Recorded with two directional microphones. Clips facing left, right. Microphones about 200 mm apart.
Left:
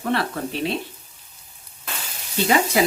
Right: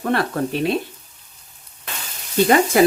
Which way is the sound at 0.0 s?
50° right (ahead or behind).